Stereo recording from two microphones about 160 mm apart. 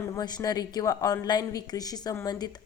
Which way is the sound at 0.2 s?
25° left (ahead or behind).